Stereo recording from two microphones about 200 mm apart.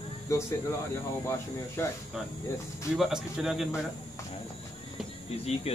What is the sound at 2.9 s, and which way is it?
Speech, centre (ahead or behind).